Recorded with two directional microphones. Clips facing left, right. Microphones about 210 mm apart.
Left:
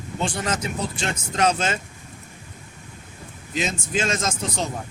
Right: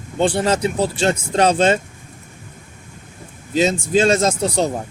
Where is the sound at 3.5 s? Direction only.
30° right (ahead or behind).